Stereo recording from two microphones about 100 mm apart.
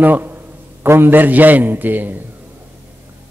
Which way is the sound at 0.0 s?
20° right (ahead or behind).